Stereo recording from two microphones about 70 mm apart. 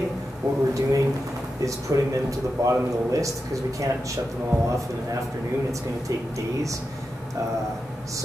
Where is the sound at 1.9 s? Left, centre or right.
Right.